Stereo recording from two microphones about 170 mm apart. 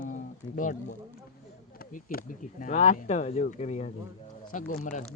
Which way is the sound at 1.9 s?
55° left (ahead or behind).